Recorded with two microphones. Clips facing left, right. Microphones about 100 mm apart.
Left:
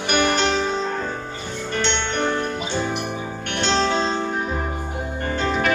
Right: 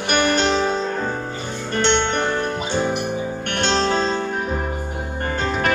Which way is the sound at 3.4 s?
40° right (ahead or behind).